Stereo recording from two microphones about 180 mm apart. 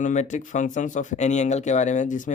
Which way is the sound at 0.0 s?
40° left (ahead or behind).